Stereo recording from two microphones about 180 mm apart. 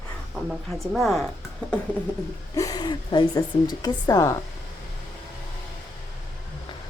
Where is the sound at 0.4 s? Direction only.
Centre (ahead or behind).